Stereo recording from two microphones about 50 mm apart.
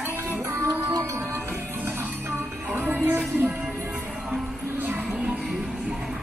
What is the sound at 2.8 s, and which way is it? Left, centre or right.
Music, right.